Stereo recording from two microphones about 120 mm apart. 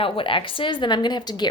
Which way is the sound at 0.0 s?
45° left (ahead or behind).